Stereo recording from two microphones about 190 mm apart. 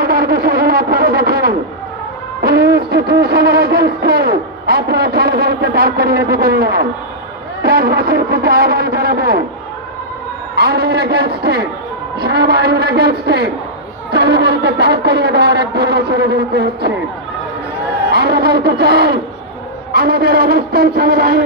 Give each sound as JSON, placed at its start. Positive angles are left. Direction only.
{"t": 0.0, "sound": "speech", "side_deg": -55}
{"t": 2.4, "sound": "music", "side_deg": -55}
{"t": 10.5, "sound": "music", "side_deg": -55}
{"t": 18.1, "sound": "music", "side_deg": -60}